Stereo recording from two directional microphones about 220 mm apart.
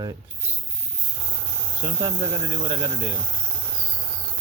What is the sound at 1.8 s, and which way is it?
Speech, 20° right (ahead or behind).